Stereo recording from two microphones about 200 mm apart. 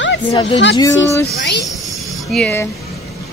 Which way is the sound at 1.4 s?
60° left (ahead or behind).